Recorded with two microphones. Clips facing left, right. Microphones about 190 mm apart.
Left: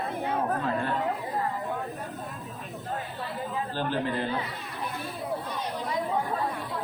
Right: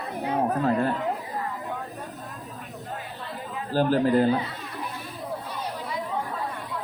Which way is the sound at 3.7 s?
40° right (ahead or behind).